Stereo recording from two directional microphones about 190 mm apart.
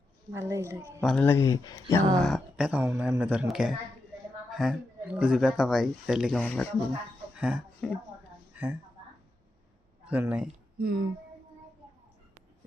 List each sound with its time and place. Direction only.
0.3 s a woman's voice: 15° right (ahead or behind)
1.0 s speech: 5° left (ahead or behind)
2.1 s speech: centre (ahead or behind)
7.3 s speech: 5° right (ahead or behind)
8.5 s a woman's voice: 10° right (ahead or behind)
10.1 s a woman's voice: 10° right (ahead or behind)
10.8 s a sound: 50° right (ahead or behind)